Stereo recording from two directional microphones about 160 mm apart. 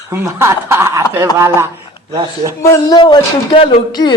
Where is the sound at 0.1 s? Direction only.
15° right (ahead or behind).